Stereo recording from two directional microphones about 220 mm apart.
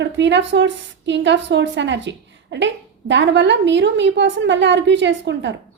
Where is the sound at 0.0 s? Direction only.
55° right (ahead or behind).